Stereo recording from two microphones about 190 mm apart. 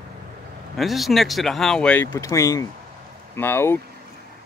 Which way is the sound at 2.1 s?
15° left (ahead or behind).